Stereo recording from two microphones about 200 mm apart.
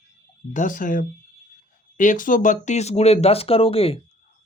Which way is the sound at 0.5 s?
40° left (ahead or behind).